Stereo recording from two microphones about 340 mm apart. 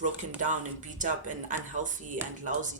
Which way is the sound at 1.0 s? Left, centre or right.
Right.